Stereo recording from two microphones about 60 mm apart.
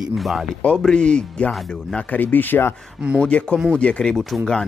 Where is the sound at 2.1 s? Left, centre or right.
Left.